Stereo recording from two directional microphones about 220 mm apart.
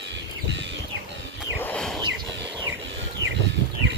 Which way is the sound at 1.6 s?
5° left (ahead or behind).